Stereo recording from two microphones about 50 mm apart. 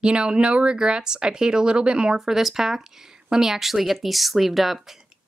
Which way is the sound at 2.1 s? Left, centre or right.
Centre.